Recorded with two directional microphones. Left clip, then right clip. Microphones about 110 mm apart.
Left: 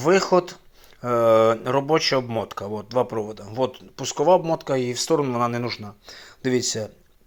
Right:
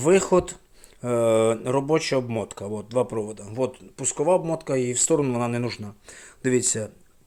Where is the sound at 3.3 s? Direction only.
20° right (ahead or behind).